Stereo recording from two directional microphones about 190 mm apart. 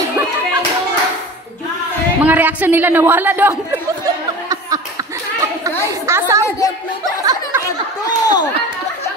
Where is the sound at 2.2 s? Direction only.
10° right (ahead or behind).